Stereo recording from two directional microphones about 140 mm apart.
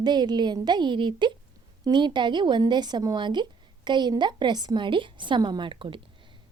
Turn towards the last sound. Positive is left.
turn(degrees=-35)  # may be behind; listen again after turning